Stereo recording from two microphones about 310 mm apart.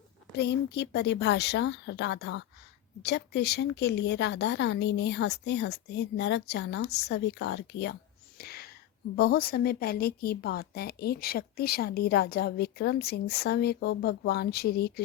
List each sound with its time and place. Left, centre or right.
0.3 s a woman's voice: left
8.4 s a sound: left
9.1 s a woman's voice: left